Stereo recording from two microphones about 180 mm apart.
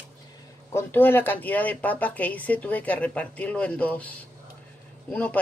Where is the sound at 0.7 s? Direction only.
10° left (ahead or behind).